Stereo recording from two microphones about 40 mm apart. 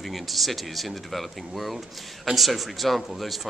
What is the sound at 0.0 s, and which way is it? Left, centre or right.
A man's voice, centre.